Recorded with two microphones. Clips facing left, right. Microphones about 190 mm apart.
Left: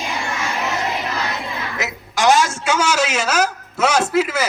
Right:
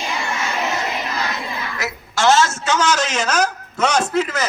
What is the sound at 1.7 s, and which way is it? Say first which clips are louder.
A man's voice: left 1 dB; 15° left (ahead or behind).